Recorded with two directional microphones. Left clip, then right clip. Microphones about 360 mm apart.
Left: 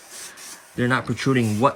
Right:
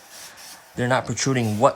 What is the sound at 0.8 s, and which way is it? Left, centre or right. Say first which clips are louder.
Speech: right 1 dB; centre.